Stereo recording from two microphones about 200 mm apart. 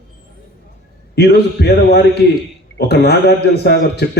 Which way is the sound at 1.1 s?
55° left (ahead or behind).